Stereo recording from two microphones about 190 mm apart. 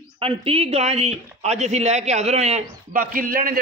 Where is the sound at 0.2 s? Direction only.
30° right (ahead or behind).